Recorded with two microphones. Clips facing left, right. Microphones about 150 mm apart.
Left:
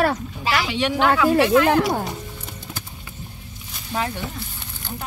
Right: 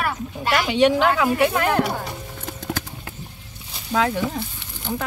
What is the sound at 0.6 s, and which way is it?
Speech, 40° right (ahead or behind).